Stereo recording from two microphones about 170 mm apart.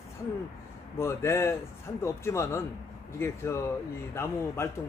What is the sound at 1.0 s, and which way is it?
A man's voice, 15° left (ahead or behind).